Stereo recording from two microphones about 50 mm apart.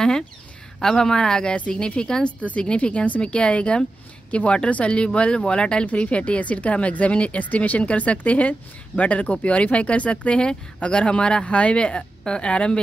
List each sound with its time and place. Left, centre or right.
0.7 s a woman's voice: centre